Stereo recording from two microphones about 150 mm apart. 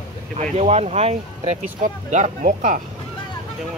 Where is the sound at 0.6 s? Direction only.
45° right (ahead or behind).